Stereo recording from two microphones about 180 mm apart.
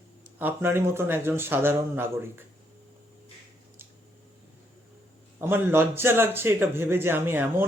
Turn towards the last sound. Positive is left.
turn(degrees=-10)  # may be behind; listen again after turning